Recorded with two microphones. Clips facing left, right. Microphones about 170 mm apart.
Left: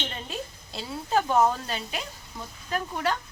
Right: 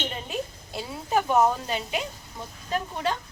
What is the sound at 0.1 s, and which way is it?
A woman's voice, 15° right (ahead or behind).